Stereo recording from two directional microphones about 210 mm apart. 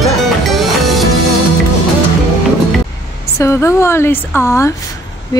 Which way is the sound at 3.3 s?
15° left (ahead or behind).